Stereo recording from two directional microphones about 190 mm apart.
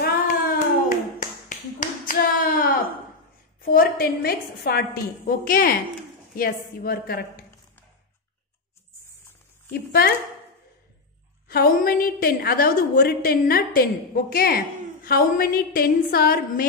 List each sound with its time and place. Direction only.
0.0 s a sound: 50° left (ahead or behind)
3.6 s a woman's voice: 50° left (ahead or behind)
9.7 s a woman's voice: 55° left (ahead or behind)
11.4 s a woman's voice: 50° left (ahead or behind)